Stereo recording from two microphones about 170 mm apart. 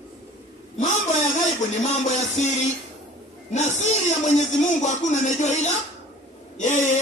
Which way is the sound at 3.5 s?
40° left (ahead or behind).